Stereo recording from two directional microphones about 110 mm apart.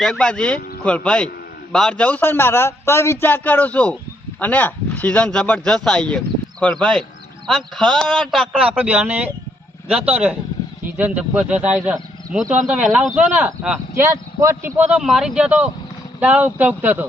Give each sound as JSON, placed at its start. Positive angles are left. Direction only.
{"t": 0.0, "sound": "a man's voice", "side_deg": 10}
{"t": 8.8, "sound": "a man's voice", "side_deg": -15}
{"t": 13.1, "sound": "speech", "side_deg": -15}
{"t": 13.9, "sound": "speech", "side_deg": -30}
{"t": 14.8, "sound": "speech", "side_deg": -10}